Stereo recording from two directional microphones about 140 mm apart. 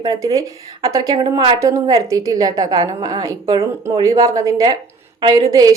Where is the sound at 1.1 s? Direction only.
35° right (ahead or behind).